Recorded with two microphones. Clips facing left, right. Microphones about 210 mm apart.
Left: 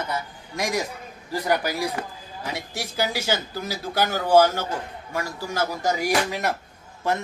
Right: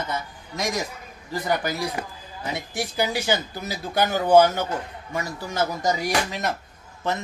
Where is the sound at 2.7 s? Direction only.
15° right (ahead or behind).